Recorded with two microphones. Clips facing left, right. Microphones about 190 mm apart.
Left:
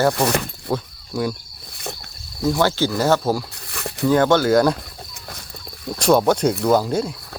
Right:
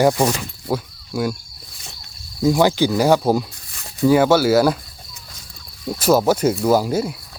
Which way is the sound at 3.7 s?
65° left (ahead or behind).